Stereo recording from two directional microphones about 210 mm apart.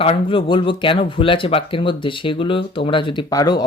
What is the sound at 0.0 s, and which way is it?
Speech, 25° left (ahead or behind).